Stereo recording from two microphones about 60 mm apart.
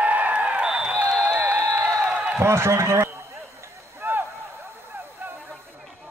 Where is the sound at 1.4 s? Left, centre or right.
Right.